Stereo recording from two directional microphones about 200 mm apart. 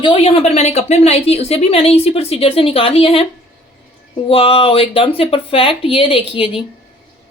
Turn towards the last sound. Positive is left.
turn(degrees=25)  # may be behind; listen again after turning